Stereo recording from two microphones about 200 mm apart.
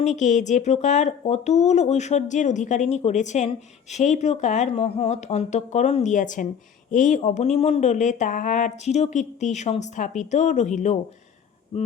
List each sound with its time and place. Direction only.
0.0 s speech: 35° left (ahead or behind)